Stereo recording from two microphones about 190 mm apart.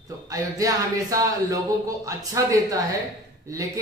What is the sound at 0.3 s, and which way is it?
Speech, 15° right (ahead or behind).